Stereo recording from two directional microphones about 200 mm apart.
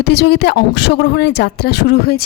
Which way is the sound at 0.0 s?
55° left (ahead or behind).